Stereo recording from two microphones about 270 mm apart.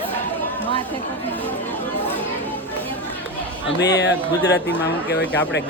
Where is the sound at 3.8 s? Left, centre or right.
Left.